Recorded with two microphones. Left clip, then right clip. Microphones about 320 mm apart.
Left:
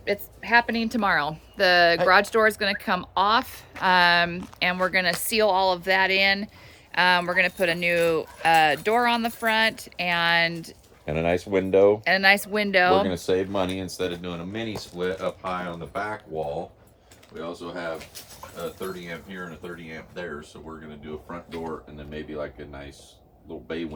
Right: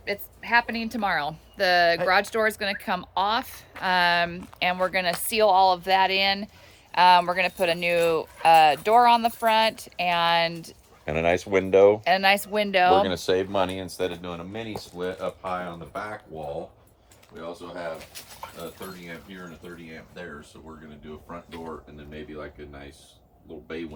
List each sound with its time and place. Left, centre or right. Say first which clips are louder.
0.0 s a woman's voice: left 3 dB; centre
11.0 s speech: right 1 dB; right
12.0 s a woman's voice: left 1 dB; centre
13.1 s speech: even; right; by 16.1 s centre
17.3 s a woman's voice: left 2 dB; centre
18.1 s speech: right 2 dB; right
21.2 s a woman's voice: left 3 dB; centre